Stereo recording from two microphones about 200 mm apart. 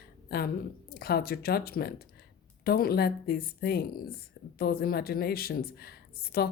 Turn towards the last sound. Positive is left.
turn(degrees=50)  # may be behind; listen again after turning